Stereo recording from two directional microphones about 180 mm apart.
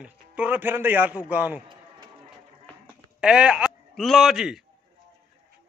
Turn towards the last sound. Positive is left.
turn(degrees=-5)  # may be behind; listen again after turning